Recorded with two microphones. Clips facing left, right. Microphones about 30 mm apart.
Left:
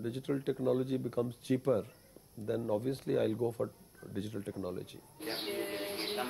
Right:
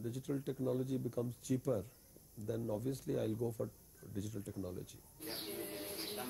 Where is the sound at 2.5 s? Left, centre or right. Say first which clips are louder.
Left 6 dB; left.